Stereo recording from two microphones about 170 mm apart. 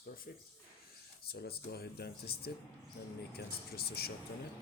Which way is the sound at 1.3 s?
70° left (ahead or behind).